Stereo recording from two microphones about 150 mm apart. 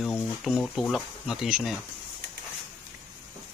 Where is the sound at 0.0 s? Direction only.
Centre (ahead or behind).